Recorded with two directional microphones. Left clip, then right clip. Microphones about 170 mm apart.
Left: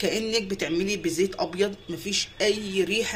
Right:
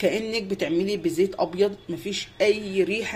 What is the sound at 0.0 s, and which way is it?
Speech, 40° right (ahead or behind).